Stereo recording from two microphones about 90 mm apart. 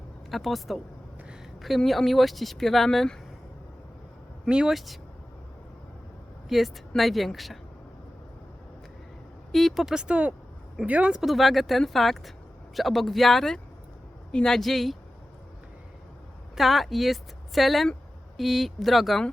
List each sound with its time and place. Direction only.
0.3 s speech: centre (ahead or behind)
4.4 s speech: 10° right (ahead or behind)
6.5 s speech: centre (ahead or behind)
9.5 s speech: centre (ahead or behind)
16.6 s speech: centre (ahead or behind)